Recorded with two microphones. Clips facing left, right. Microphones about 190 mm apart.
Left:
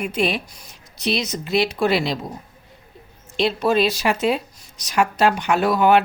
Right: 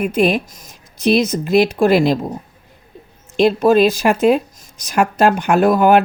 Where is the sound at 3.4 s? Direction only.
50° right (ahead or behind).